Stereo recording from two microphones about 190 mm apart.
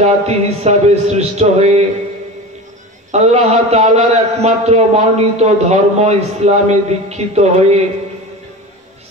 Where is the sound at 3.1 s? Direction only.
35° right (ahead or behind).